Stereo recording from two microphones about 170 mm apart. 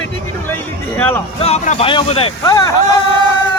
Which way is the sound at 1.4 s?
40° left (ahead or behind).